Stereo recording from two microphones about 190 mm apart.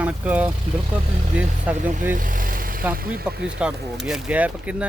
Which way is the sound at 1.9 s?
45° right (ahead or behind).